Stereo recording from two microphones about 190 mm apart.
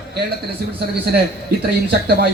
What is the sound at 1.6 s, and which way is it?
Speech, 55° right (ahead or behind).